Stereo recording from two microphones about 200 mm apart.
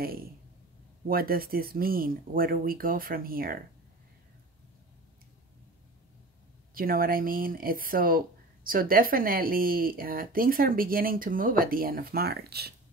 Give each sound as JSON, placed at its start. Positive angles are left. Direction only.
{"t": 0.0, "sound": "speech", "side_deg": -50}
{"t": 6.7, "sound": "speech", "side_deg": -45}